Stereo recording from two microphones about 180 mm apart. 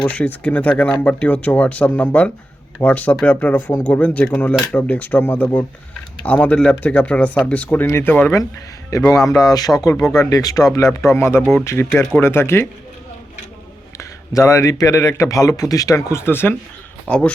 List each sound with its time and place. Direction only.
0.0 s a man's voice: 10° left (ahead or behind)
14.0 s a man's voice: 15° left (ahead or behind)